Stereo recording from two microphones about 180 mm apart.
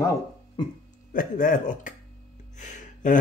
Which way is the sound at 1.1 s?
50° left (ahead or behind).